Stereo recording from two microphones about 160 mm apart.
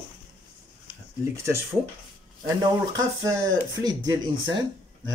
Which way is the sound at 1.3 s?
15° right (ahead or behind).